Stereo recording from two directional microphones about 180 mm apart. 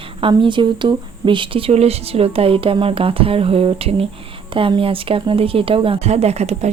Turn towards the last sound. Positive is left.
turn(degrees=-40)  # may be behind; listen again after turning